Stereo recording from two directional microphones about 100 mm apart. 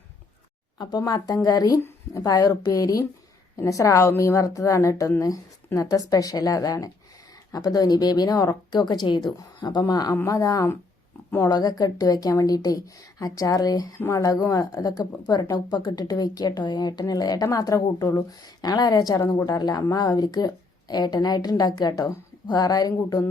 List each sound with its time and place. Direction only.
0.8 s a woman's voice: 45° left (ahead or behind)